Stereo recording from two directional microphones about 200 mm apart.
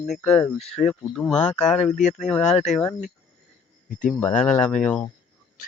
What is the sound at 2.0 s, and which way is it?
Speech, 35° left (ahead or behind).